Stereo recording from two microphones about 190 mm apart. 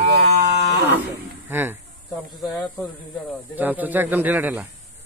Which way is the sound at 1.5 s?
10° right (ahead or behind).